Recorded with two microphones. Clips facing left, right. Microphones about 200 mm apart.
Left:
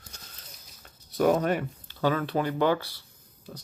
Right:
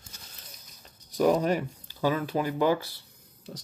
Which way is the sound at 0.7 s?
Centre (ahead or behind).